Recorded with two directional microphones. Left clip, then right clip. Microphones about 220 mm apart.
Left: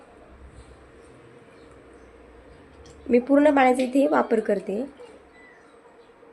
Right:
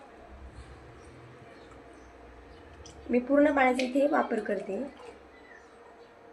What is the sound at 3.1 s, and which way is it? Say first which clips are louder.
Speech: left 6 dB; 55° left (ahead or behind).